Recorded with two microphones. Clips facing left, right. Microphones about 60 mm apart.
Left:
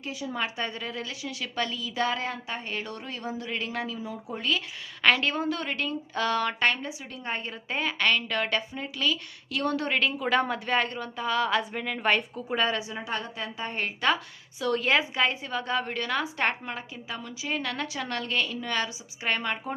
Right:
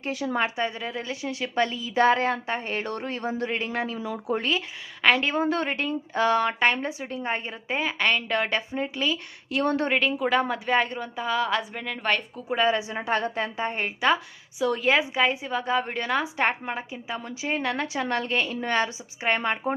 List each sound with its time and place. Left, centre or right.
0.1 s a woman's voice: right
0.5 s a woman's voice: centre
1.0 s a woman's voice: right
3.9 s speech: right
5.0 s a woman's voice: centre
5.3 s a woman's voice: right
6.7 s a woman's voice: right
7.1 s a woman's voice: right
10.0 s a woman's voice: centre
12.5 s a woman's voice: centre
12.9 s a woman's voice: right
13.7 s a woman's voice: centre